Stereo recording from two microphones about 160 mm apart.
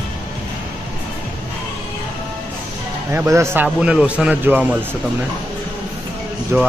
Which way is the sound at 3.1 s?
15° right (ahead or behind).